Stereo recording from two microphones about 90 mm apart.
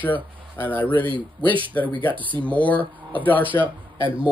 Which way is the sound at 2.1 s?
65° right (ahead or behind).